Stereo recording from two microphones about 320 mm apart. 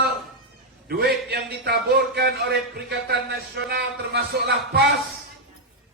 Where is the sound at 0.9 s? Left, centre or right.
Right.